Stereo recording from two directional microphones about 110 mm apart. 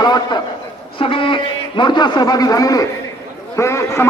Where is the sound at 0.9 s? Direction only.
50° left (ahead or behind).